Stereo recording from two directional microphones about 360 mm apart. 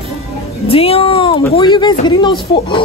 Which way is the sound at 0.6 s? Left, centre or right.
Centre.